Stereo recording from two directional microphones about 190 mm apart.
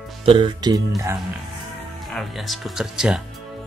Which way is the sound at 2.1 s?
Centre (ahead or behind).